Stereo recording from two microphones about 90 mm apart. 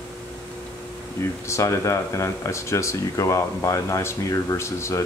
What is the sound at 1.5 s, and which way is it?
Speech, 35° left (ahead or behind).